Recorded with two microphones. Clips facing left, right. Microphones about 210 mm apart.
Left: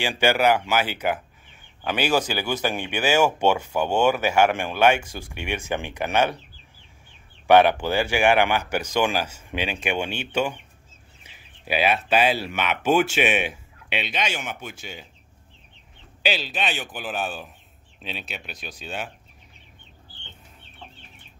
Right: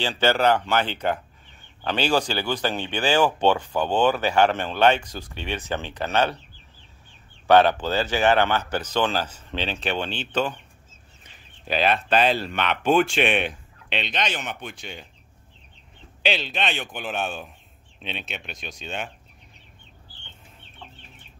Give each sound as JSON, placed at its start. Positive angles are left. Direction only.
{"t": 0.0, "sound": "speech", "side_deg": 10}
{"t": 7.4, "sound": "speech", "side_deg": 15}
{"t": 16.2, "sound": "speech", "side_deg": 5}